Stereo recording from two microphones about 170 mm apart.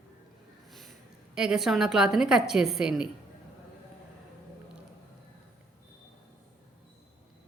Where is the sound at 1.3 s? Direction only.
5° right (ahead or behind).